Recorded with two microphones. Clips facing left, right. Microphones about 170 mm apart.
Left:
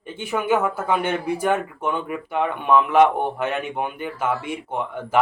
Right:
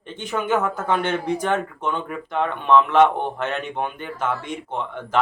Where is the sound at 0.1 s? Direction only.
10° left (ahead or behind).